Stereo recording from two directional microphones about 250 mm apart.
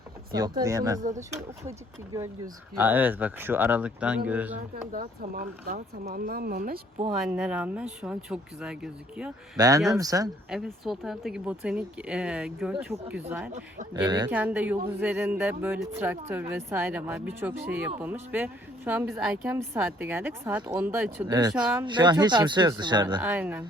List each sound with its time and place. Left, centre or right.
0.6 s a woman's voice: centre
2.1 s a woman's voice: centre
4.9 s speech: right
7.3 s speech: centre
9.6 s a woman's voice: centre
10.5 s speech: centre
13.9 s a woman's voice: centre
14.3 s a woman's voice: centre
21.5 s speech: centre
21.8 s a woman's voice: centre
23.2 s a woman's voice: centre